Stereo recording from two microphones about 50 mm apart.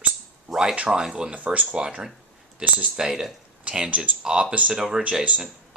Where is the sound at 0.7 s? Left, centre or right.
Right.